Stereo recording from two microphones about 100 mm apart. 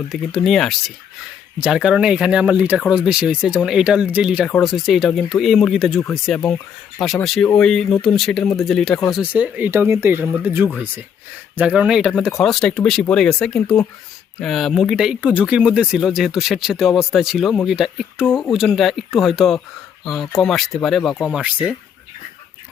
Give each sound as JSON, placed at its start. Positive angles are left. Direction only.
{"t": 0.1, "sound": "speech", "side_deg": 0}
{"t": 9.3, "sound": "speech", "side_deg": -15}